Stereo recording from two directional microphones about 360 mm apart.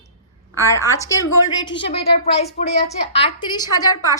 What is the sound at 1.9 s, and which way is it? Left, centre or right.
A woman's voice, centre.